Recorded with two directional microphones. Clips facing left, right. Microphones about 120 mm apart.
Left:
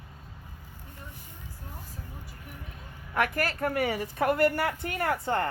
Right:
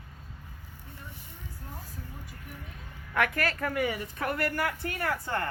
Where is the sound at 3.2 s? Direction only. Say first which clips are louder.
Left 1 dB; 30° left (ahead or behind).